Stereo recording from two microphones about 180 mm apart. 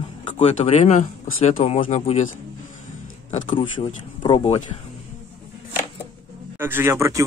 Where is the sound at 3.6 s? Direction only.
25° left (ahead or behind).